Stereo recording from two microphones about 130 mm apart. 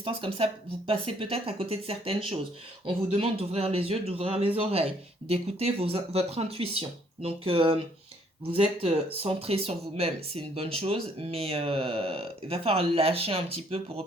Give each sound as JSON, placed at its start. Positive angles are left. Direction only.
{"t": 0.0, "sound": "speech", "side_deg": -45}
{"t": 8.8, "sound": "speech", "side_deg": -45}